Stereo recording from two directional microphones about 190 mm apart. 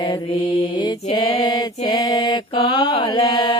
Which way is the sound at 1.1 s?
25° left (ahead or behind).